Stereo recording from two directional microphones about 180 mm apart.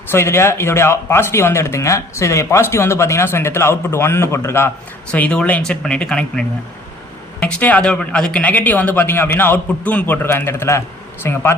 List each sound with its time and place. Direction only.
0.1 s speech: 15° left (ahead or behind)
7.4 s speech: 10° left (ahead or behind)